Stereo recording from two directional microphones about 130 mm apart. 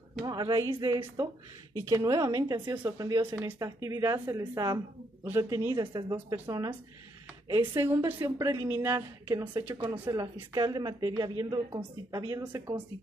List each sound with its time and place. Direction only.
0.2 s speech: 30° right (ahead or behind)
3.3 s speech: 20° right (ahead or behind)
6.1 s speech: 15° right (ahead or behind)
7.4 s a woman's voice: 30° right (ahead or behind)
7.8 s speech: 20° right (ahead or behind)
9.4 s a woman's voice: 35° right (ahead or behind)